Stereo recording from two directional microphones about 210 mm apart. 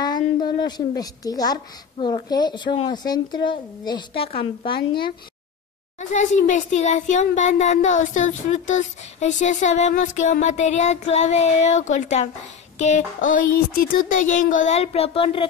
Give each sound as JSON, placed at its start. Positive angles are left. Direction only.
{"t": 0.0, "sound": "a woman's voice", "side_deg": 20}
{"t": 5.9, "sound": "speech", "side_deg": 35}